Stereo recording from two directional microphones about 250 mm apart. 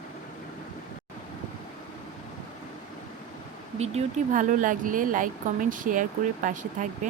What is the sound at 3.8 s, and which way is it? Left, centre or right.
Speech, right.